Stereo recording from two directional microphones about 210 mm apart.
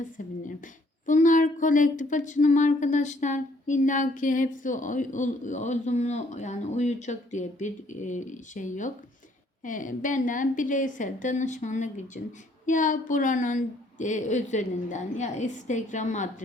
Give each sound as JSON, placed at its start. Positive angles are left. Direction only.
{"t": 1.0, "sound": "speech", "side_deg": 35}